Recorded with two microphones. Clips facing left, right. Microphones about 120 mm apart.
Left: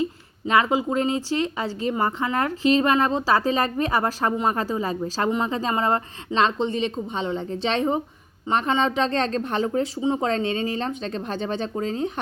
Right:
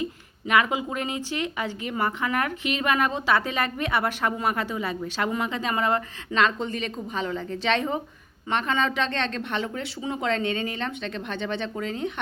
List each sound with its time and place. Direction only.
0.0 s a woman's voice: 25° left (ahead or behind)